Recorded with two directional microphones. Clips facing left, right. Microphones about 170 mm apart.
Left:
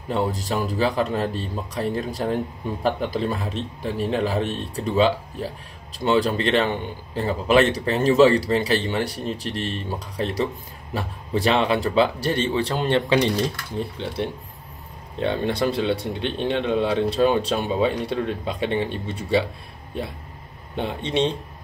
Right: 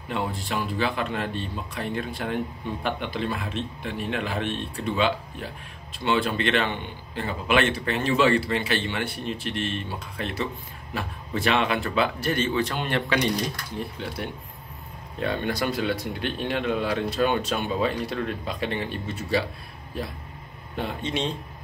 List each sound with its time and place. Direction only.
0.1 s speech: 40° left (ahead or behind)